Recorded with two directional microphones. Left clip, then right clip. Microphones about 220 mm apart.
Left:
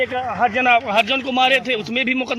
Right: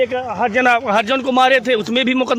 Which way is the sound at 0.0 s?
45° right (ahead or behind).